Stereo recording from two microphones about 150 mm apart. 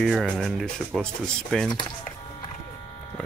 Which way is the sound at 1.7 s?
30° left (ahead or behind).